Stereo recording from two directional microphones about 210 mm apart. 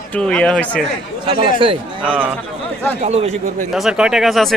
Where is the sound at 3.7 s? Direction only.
Centre (ahead or behind).